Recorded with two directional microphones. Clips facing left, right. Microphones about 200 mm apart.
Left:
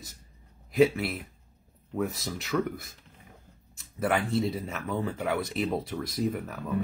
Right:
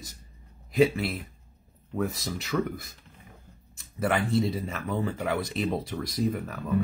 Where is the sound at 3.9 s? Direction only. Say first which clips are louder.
Right 1 dB; centre (ahead or behind).